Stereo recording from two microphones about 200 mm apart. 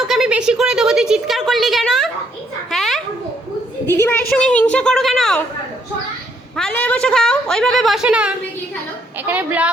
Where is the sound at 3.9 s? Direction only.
15° left (ahead or behind).